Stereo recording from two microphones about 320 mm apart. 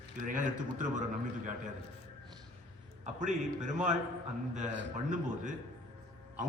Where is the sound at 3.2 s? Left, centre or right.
Right.